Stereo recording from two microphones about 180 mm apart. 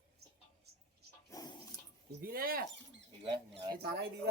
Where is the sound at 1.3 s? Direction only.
20° left (ahead or behind).